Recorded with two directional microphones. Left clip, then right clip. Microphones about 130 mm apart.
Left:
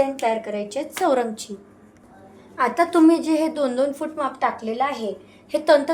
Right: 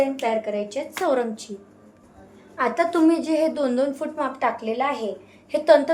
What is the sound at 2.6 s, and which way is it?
A woman's voice, 35° left (ahead or behind).